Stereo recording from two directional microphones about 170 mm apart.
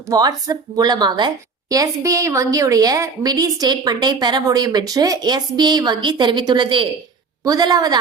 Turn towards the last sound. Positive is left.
turn(degrees=-25)  # may be behind; listen again after turning